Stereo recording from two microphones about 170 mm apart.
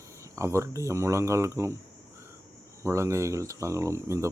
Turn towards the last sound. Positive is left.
turn(degrees=-15)  # may be behind; listen again after turning